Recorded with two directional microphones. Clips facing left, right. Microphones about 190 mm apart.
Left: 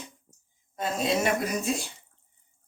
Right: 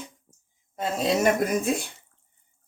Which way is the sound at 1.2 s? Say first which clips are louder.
Right 5 dB; 55° right (ahead or behind).